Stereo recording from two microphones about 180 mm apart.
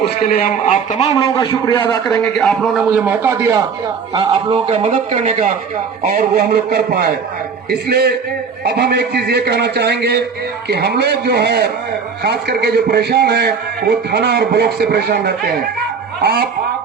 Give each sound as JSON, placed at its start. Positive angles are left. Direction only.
{"t": 0.4, "sound": "a man's voice", "side_deg": 40}
{"t": 1.2, "sound": "a man's voice", "side_deg": 20}
{"t": 2.4, "sound": "a man's voice", "side_deg": 0}
{"t": 4.1, "sound": "a man's voice", "side_deg": -30}